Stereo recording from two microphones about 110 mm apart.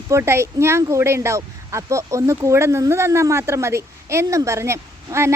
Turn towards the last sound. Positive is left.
turn(degrees=-25)  # may be behind; listen again after turning